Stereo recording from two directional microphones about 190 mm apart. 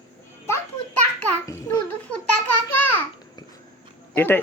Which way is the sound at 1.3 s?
15° left (ahead or behind).